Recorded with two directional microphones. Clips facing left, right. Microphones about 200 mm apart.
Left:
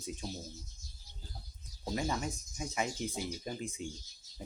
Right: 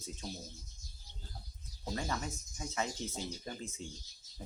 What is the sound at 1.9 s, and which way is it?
Speech, 15° left (ahead or behind).